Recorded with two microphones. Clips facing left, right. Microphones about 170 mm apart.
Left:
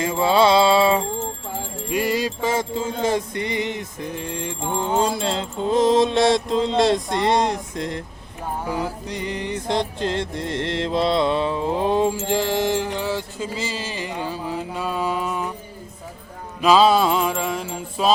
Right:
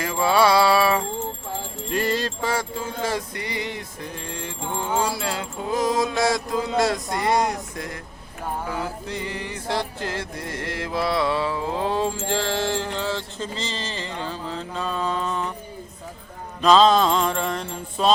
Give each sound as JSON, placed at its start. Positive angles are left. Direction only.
{"t": 0.0, "sound": "music", "side_deg": 25}
{"t": 1.9, "sound": "music", "side_deg": 10}
{"t": 16.6, "sound": "music", "side_deg": 10}